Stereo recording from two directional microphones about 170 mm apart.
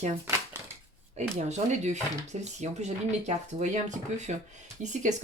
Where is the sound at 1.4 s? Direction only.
40° right (ahead or behind).